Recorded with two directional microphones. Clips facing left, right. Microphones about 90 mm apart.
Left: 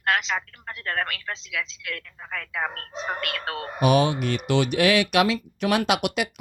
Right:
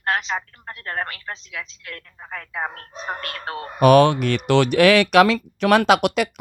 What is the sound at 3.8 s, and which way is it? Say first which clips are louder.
Speech: right 7 dB; 85° right.